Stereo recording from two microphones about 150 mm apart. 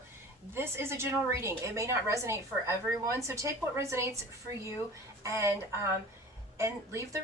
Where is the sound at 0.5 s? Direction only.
15° right (ahead or behind).